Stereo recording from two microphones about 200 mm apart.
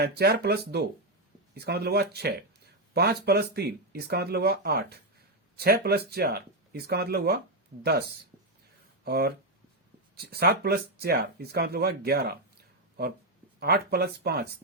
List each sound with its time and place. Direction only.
0.0 s speech: 55° right (ahead or behind)
13.6 s speech: 50° right (ahead or behind)